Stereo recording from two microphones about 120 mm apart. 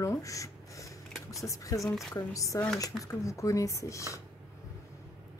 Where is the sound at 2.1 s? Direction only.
30° left (ahead or behind).